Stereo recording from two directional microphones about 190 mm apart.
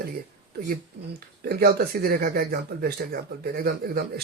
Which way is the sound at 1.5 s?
55° right (ahead or behind).